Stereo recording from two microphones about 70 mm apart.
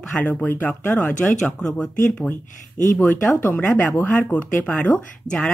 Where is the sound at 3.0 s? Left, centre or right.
Left.